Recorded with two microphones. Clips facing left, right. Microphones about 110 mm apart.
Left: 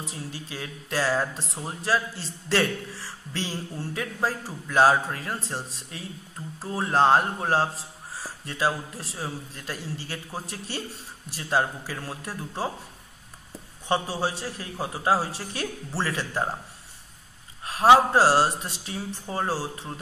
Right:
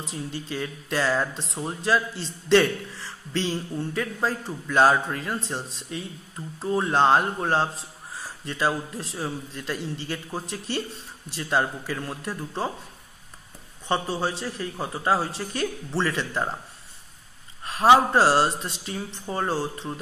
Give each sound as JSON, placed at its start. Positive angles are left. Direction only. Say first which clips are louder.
{"t": 0.0, "sound": "a man's voice", "louder": "right 3 dB", "side_deg": 5}
{"t": 13.8, "sound": "a man's voice", "louder": "even", "side_deg": 10}
{"t": 17.6, "sound": "a man's voice", "louder": "even", "side_deg": 5}